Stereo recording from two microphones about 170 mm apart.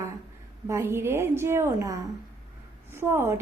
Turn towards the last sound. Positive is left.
turn(degrees=-15)  # may be behind; listen again after turning